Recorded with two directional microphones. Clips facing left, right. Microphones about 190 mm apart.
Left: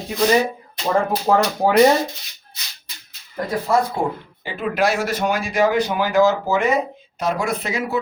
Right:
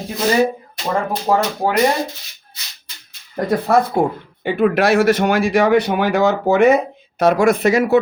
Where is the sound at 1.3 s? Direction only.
5° right (ahead or behind).